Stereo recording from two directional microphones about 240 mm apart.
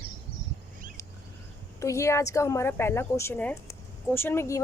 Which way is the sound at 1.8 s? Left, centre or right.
Centre.